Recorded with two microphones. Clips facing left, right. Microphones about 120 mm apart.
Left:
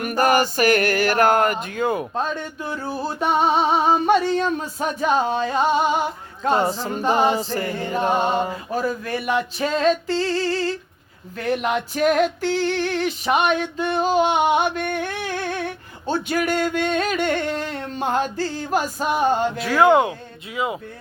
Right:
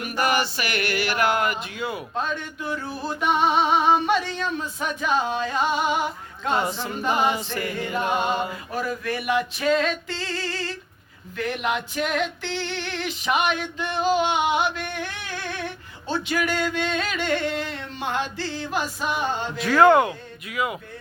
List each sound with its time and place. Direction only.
0.0 s music: 45° left (ahead or behind)
16.0 s singing: 45° left (ahead or behind)
19.5 s speech: 5° left (ahead or behind)
19.9 s speech: 20° left (ahead or behind)